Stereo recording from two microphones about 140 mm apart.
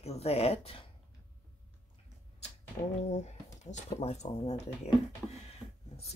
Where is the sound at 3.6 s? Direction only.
55° left (ahead or behind).